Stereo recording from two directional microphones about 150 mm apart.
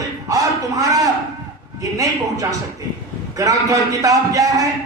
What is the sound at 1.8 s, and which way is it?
A man's voice, 20° right (ahead or behind).